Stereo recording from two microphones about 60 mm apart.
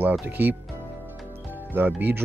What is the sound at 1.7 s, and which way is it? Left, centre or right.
Speech, right.